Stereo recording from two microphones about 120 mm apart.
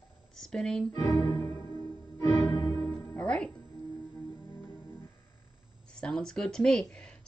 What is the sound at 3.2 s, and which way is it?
Music, 10° left (ahead or behind).